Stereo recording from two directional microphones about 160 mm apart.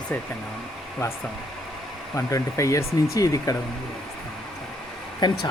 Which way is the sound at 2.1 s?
20° left (ahead or behind).